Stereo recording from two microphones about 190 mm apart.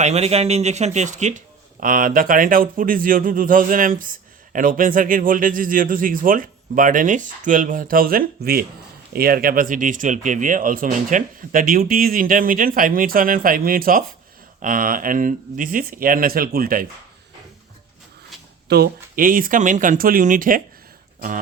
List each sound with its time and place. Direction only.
0.0 s speech: 35° right (ahead or behind); by 16.8 s 50° right (ahead or behind)
18.7 s speech: 55° right (ahead or behind)